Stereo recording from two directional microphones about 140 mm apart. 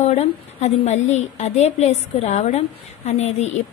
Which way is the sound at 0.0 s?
50° left (ahead or behind).